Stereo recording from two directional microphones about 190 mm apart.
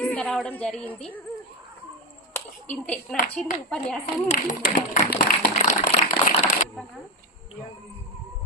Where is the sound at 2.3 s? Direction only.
5° left (ahead or behind).